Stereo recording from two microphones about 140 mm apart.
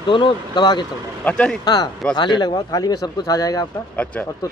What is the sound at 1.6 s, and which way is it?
Speech, 30° left (ahead or behind).